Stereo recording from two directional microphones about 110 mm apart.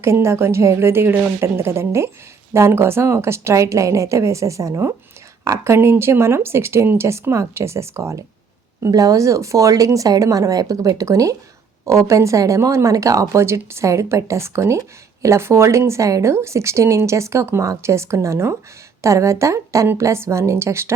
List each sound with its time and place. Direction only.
0.0 s speech: 25° right (ahead or behind)